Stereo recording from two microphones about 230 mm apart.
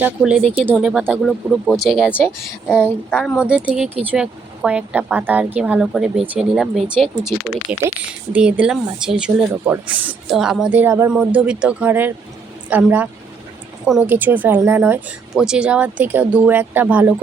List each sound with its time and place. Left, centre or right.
0.0 s speech: centre